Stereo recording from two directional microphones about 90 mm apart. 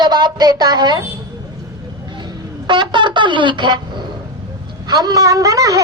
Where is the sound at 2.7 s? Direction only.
60° right (ahead or behind).